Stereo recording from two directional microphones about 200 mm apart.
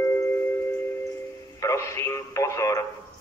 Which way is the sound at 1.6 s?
15° left (ahead or behind).